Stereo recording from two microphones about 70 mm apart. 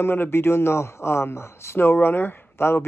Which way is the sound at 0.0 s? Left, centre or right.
Left.